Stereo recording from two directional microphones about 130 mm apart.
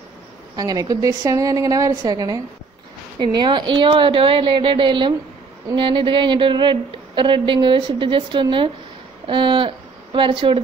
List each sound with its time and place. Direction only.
0.6 s a woman's voice: 30° right (ahead or behind)